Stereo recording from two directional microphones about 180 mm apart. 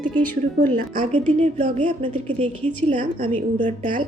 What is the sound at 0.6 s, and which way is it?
A woman's voice, 45° right (ahead or behind).